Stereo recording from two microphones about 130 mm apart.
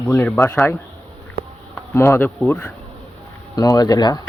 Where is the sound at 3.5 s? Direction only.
30° left (ahead or behind).